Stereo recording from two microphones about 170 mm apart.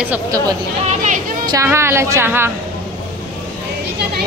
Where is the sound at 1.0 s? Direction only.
50° right (ahead or behind).